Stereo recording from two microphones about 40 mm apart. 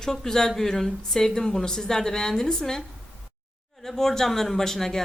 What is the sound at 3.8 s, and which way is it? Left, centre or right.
A woman's voice, centre.